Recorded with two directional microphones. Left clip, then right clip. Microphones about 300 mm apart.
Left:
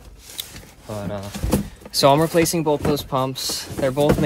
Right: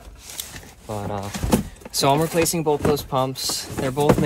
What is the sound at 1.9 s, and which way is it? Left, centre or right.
Speech, centre.